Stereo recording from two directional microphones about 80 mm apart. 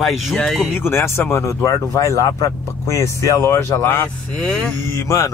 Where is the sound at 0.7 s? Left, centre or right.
Left.